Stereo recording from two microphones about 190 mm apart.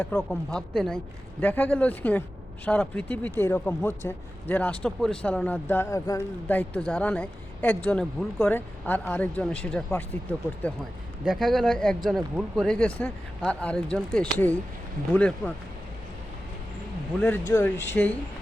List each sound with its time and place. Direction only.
0.0 s speech: 5° left (ahead or behind)
11.3 s speech: centre (ahead or behind)
17.2 s speech: 10° left (ahead or behind)